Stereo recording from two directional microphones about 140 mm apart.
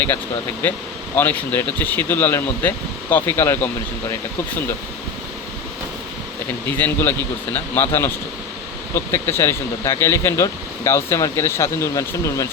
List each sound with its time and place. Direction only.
1.1 s speech: 15° left (ahead or behind)
6.7 s speech: 15° left (ahead or behind)